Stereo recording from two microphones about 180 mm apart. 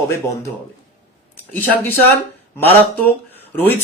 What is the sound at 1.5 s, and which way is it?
Speech, 10° left (ahead or behind).